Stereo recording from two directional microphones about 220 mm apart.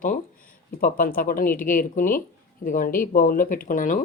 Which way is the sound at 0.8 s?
40° left (ahead or behind).